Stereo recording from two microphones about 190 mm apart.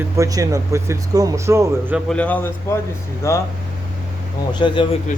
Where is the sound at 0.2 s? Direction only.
15° right (ahead or behind).